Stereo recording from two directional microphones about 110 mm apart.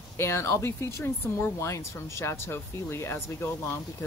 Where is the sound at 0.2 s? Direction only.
25° left (ahead or behind).